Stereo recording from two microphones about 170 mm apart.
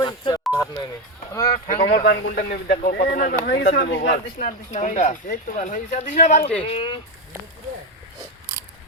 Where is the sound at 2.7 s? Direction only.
85° left.